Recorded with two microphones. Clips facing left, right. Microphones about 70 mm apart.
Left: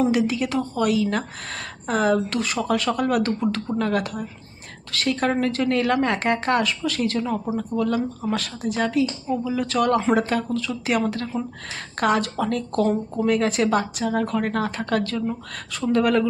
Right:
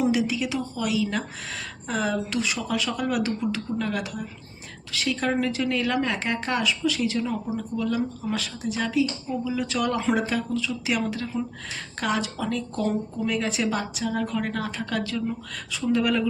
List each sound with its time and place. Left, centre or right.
0.0 s a woman's voice: left
7.3 s speech: left
7.8 s a woman's voice: left